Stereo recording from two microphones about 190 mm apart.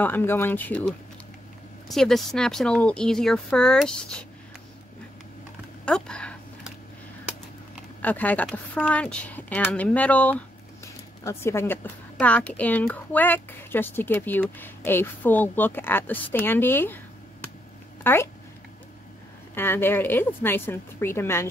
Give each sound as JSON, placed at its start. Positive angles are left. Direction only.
{"t": 0.0, "sound": "a woman's voice", "side_deg": 10}
{"t": 5.9, "sound": "speech", "side_deg": 5}
{"t": 8.0, "sound": "a woman's voice", "side_deg": 10}
{"t": 18.0, "sound": "a woman's voice", "side_deg": 10}
{"t": 19.5, "sound": "a woman's voice", "side_deg": 10}